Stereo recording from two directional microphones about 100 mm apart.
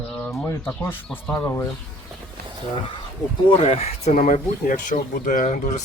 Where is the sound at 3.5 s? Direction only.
75° left (ahead or behind).